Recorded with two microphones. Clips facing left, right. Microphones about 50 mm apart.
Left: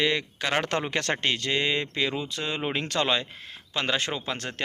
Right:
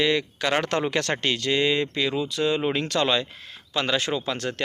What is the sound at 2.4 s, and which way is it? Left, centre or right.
Speech, centre.